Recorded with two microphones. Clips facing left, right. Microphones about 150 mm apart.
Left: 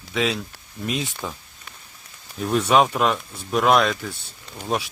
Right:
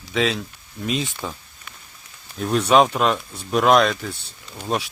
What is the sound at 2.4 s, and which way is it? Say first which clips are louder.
Speech: right 2 dB; 5° left (ahead or behind).